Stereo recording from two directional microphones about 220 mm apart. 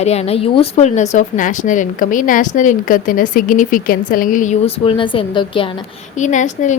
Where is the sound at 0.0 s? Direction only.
30° left (ahead or behind).